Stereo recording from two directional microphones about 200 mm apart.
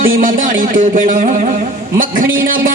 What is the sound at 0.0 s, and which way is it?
Music, 45° right (ahead or behind).